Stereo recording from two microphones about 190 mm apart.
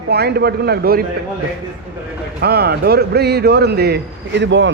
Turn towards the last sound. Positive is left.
turn(degrees=-70)  # may be behind; listen again after turning